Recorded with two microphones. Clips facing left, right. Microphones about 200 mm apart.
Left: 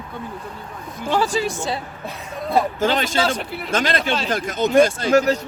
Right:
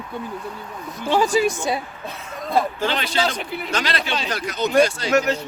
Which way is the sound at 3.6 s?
50° left (ahead or behind).